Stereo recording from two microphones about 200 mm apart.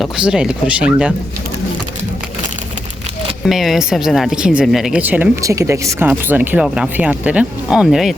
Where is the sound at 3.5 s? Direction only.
Centre (ahead or behind).